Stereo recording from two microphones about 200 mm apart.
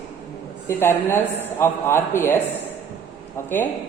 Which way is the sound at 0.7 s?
10° left (ahead or behind).